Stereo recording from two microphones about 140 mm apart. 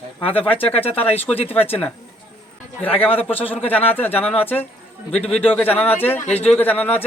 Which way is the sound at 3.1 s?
40° left (ahead or behind).